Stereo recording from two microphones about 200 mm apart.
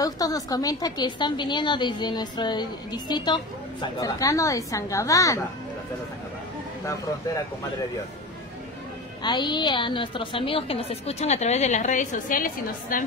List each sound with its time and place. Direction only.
0.0 s a woman's voice: 20° left (ahead or behind)
9.2 s a woman's voice: 20° left (ahead or behind); by 13.0 s 45° left (ahead or behind)